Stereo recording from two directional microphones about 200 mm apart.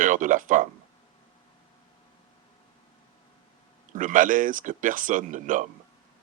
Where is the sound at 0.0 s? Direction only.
40° right (ahead or behind).